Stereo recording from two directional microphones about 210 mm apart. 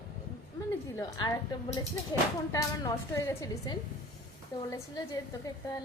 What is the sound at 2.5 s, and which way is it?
A woman's voice, 15° left (ahead or behind).